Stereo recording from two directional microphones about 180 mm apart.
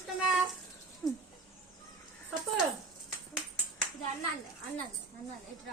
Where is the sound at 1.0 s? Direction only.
5° left (ahead or behind).